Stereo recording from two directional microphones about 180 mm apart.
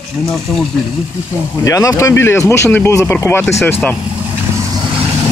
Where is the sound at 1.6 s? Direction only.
15° left (ahead or behind).